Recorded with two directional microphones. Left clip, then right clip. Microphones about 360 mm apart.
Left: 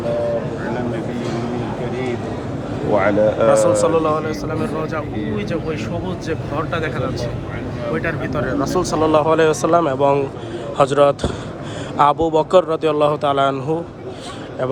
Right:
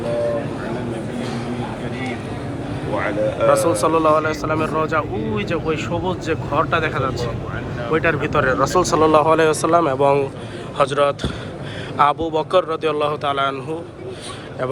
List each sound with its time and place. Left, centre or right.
2.9 s speech: left
3.5 s speech: centre